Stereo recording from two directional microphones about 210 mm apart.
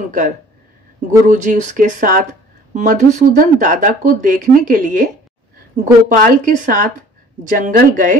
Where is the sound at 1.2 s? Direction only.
35° right (ahead or behind).